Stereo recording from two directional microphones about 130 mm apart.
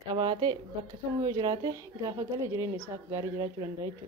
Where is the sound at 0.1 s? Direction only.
40° right (ahead or behind).